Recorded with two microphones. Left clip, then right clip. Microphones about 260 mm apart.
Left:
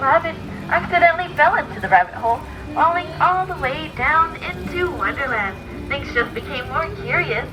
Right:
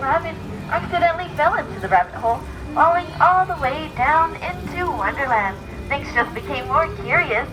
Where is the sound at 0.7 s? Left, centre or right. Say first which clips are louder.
Left 4 dB; centre; by 7.4 s right.